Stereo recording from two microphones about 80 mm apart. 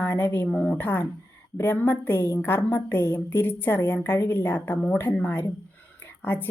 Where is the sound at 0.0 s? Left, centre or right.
Left.